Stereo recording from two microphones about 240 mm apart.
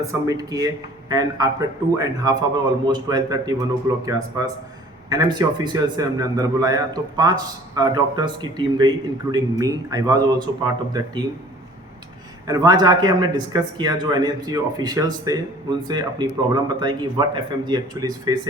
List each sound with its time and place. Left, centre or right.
0.0 s a man's voice: centre
12.5 s a man's voice: centre